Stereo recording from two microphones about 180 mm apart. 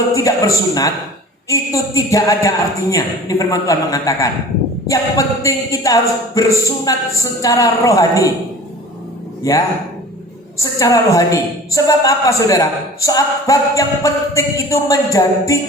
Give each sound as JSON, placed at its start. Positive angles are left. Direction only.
{"t": 0.1, "sound": "a man's voice", "side_deg": 15}
{"t": 9.5, "sound": "a woman's voice", "side_deg": 20}